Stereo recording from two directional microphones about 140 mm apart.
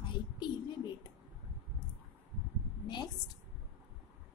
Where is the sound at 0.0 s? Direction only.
30° left (ahead or behind).